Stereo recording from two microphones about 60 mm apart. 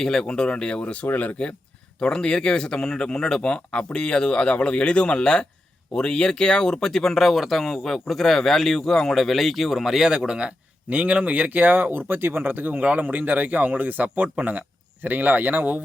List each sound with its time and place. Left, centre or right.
0.0 s speech: centre; by 15.8 s right